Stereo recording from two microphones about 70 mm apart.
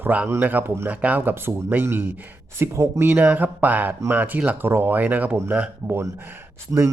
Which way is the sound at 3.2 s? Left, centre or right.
Right.